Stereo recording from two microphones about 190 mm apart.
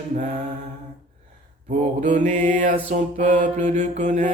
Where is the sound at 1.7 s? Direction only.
40° right (ahead or behind).